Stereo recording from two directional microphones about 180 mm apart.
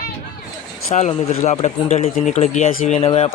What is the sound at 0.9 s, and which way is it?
Speech, 40° left (ahead or behind).